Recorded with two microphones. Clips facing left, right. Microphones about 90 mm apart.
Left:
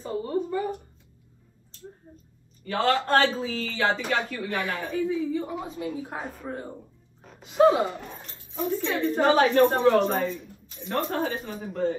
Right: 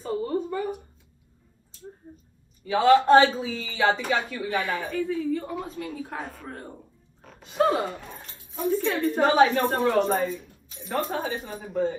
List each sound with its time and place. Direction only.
0.0 s a sound: 5° left (ahead or behind)
2.6 s speech: 10° right (ahead or behind)
5.0 s a woman's voice: 15° left (ahead or behind)
7.2 s a woman's voice: centre (ahead or behind)